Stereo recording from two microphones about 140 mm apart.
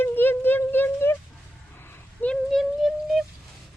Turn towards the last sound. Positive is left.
turn(degrees=0)  # may be behind; listen again after turning